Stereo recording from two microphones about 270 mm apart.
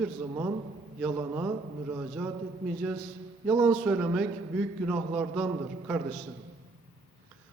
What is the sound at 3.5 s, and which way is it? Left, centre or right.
Speech, centre.